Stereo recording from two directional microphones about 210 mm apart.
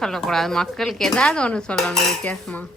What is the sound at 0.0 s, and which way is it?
Speech, centre (ahead or behind).